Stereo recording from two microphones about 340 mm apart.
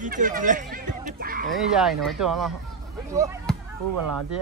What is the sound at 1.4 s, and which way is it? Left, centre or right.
Speech, centre.